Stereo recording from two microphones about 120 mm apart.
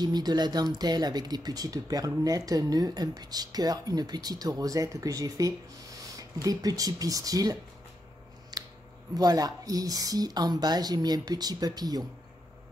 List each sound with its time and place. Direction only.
0.0 s speech: 35° right (ahead or behind)
8.5 s scissors: 35° right (ahead or behind)
9.1 s speech: 30° right (ahead or behind)